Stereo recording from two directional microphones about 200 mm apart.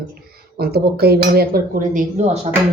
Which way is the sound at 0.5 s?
50° right (ahead or behind).